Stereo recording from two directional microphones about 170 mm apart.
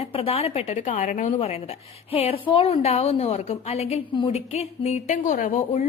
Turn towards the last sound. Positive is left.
turn(degrees=45)  # may be behind; listen again after turning